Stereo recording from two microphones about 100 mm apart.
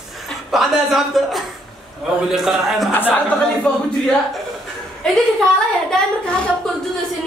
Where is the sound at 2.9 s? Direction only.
20° left (ahead or behind).